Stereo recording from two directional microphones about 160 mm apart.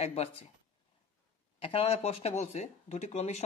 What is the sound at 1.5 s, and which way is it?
Speech, 35° left (ahead or behind).